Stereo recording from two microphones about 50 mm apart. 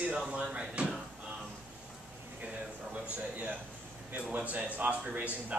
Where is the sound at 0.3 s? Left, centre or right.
Centre.